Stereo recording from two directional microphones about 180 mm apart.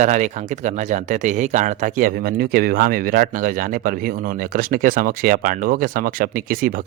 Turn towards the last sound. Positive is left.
turn(degrees=-50)  # may be behind; listen again after turning